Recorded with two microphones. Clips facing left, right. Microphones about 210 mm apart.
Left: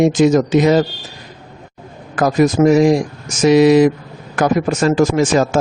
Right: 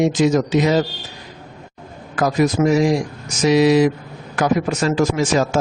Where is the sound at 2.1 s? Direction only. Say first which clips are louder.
Left 4 dB; 50° left (ahead or behind).